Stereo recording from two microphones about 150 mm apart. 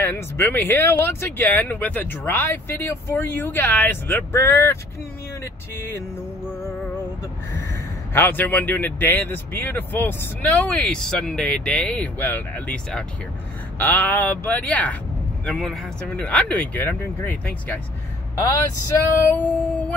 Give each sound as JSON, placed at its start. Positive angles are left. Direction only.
{"t": 0.0, "sound": "speech", "side_deg": 15}
{"t": 8.1, "sound": "speech", "side_deg": 15}
{"t": 19.2, "sound": "speech", "side_deg": 15}